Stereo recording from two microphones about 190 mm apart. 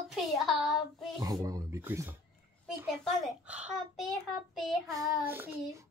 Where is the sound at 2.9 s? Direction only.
5° right (ahead or behind).